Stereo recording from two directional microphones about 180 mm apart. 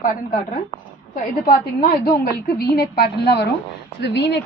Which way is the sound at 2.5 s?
60° left (ahead or behind).